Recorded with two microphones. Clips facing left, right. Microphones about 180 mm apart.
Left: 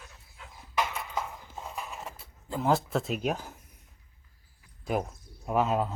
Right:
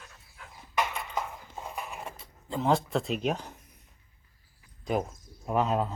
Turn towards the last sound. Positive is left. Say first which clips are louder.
# even
turn(degrees=5)  # may be behind; listen again after turning